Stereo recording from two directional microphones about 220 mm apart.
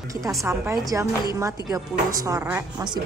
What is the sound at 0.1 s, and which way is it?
A woman's voice, 15° right (ahead or behind).